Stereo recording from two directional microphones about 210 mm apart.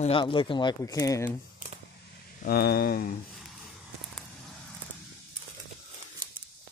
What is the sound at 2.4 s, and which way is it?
Speech, 50° left (ahead or behind).